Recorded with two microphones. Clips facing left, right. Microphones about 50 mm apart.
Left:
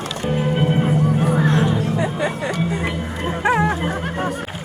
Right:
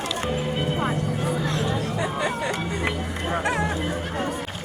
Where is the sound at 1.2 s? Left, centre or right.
Left.